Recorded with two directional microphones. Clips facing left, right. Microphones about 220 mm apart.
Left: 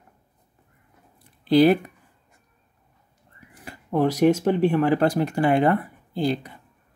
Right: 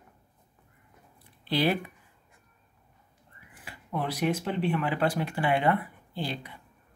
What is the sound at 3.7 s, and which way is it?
Speech, 45° left (ahead or behind).